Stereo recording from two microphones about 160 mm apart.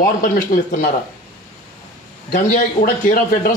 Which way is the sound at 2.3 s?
60° left (ahead or behind).